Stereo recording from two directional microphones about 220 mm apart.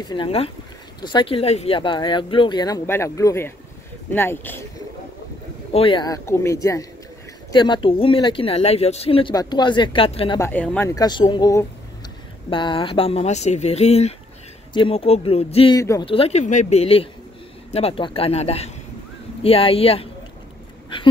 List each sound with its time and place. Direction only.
0.1 s speech: 25° left (ahead or behind)
5.7 s speech: 25° left (ahead or behind)
10.4 s speech: 5° left (ahead or behind)
11.0 s speech: 20° left (ahead or behind)
15.8 s speech: 15° left (ahead or behind)
16.1 s speech: 25° left (ahead or behind)
20.9 s a sound: 25° left (ahead or behind)